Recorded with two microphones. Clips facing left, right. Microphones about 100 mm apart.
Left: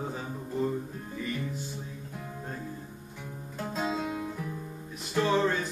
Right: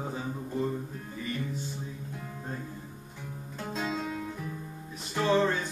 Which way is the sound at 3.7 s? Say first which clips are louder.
Left 2 dB; 10° left (ahead or behind).